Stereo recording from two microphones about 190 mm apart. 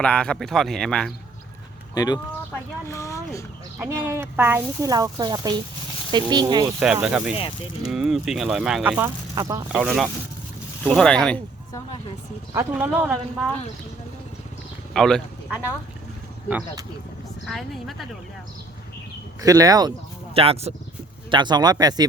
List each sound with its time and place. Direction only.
0.0 s speech: 5° left (ahead or behind)
2.0 s speech: 20° left (ahead or behind)
3.8 s speech: 15° right (ahead or behind)
6.7 s speech: 5° right (ahead or behind)
9.3 s speech: 20° right (ahead or behind)
9.7 s speech: centre (ahead or behind)
12.5 s speech: 10° right (ahead or behind)
14.9 s speech: centre (ahead or behind)
17.4 s speech: centre (ahead or behind)
19.4 s speech: 20° right (ahead or behind)
20.3 s speech: 30° right (ahead or behind)